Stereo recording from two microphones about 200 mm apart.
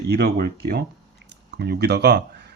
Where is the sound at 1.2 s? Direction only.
55° right (ahead or behind).